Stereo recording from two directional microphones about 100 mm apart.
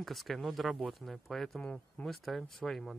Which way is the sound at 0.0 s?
Centre (ahead or behind).